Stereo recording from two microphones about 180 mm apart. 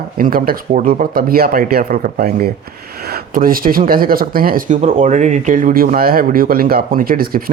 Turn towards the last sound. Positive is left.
turn(degrees=-55)  # may be behind; listen again after turning